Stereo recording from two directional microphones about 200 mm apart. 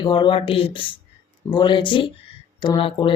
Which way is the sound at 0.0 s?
25° left (ahead or behind).